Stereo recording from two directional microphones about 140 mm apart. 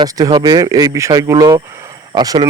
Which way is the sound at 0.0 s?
30° right (ahead or behind).